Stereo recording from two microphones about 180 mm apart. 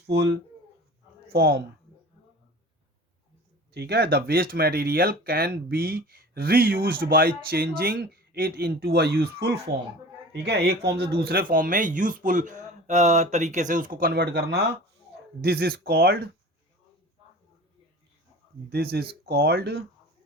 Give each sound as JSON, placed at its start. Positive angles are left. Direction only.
{"t": 0.0, "sound": "speech", "side_deg": -70}
{"t": 1.3, "sound": "speech", "side_deg": -60}
{"t": 3.7, "sound": "speech", "side_deg": -65}
{"t": 18.7, "sound": "speech", "side_deg": -60}